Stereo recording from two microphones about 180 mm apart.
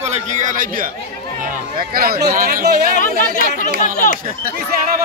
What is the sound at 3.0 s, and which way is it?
Speech, 50° left (ahead or behind).